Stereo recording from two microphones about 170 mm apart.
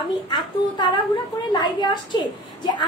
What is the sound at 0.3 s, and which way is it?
A woman's voice, 25° left (ahead or behind).